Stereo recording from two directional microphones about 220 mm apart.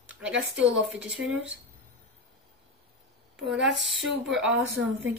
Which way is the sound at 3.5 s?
55° right (ahead or behind).